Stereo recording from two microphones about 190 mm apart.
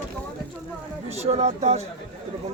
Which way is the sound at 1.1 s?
35° right (ahead or behind).